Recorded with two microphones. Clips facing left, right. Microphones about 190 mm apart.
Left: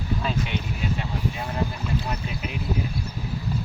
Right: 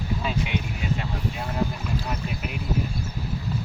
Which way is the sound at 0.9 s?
Centre (ahead or behind).